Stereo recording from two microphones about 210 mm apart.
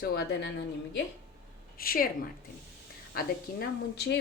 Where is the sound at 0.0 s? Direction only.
50° left (ahead or behind).